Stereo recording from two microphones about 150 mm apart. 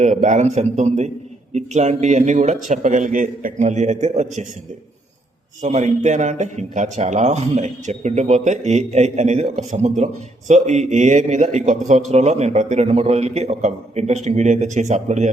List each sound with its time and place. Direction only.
0.0 s a man's voice: 55° right (ahead or behind)
5.6 s a man's voice: 50° right (ahead or behind)